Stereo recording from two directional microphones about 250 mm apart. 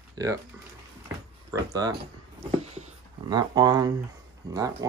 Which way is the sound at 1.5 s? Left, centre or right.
Centre.